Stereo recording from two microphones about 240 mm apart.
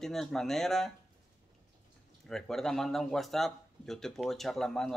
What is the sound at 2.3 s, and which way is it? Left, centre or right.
Speech, centre.